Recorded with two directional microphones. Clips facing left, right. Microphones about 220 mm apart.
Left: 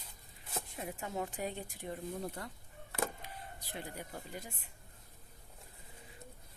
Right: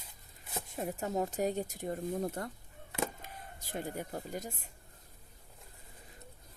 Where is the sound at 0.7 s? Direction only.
40° right (ahead or behind).